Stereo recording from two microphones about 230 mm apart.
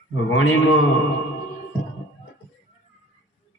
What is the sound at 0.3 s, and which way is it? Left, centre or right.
Mantra, left.